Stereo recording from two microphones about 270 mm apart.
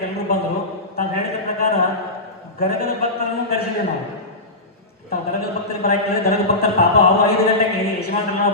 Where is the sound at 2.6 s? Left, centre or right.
Left.